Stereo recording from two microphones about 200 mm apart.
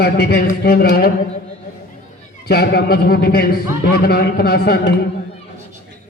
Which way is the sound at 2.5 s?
55° left (ahead or behind).